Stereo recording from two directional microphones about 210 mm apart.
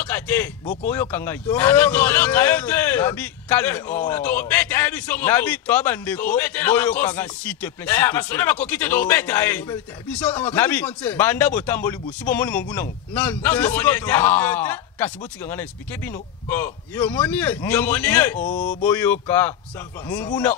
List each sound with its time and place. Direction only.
0.0 s a sound: 10° left (ahead or behind)
0.8 s a man's voice: 10° left (ahead or behind)
18.4 s speech: 40° left (ahead or behind)
18.9 s a man's voice: 10° left (ahead or behind)